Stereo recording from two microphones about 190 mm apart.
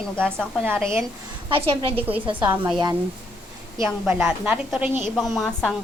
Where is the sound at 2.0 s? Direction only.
10° right (ahead or behind).